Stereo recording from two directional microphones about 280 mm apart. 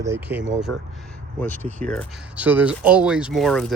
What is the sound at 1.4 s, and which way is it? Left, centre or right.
Speech, centre.